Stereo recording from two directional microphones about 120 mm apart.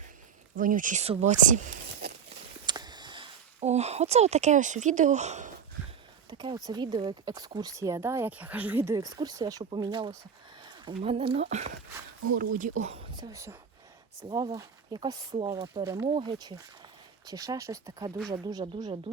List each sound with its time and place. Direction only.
0.5 s speech: 90° right
2.6 s a sound: 35° right (ahead or behind)
3.6 s speech: 65° right (ahead or behind)
6.3 s a sound: 40° right (ahead or behind)
6.7 s speech: 35° right (ahead or behind); by 9.0 s 20° right (ahead or behind)
9.0 s speech: 30° right (ahead or behind)
10.6 s a sound: 40° right (ahead or behind)
11.1 s speech: 50° right (ahead or behind)
12.5 s speech: 80° right; by 13.1 s 65° right (ahead or behind)
13.3 s speech: 25° right (ahead or behind)
16.0 s speech: 40° right (ahead or behind)